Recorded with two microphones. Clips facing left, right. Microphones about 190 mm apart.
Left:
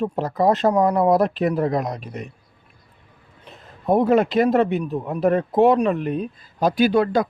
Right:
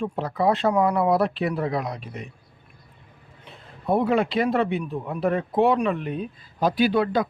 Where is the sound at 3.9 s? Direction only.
40° left (ahead or behind).